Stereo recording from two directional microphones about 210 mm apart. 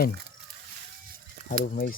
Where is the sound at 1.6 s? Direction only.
40° left (ahead or behind).